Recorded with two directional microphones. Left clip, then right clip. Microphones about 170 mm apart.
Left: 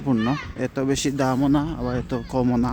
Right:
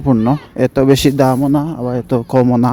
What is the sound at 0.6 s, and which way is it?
Speech, 50° right (ahead or behind).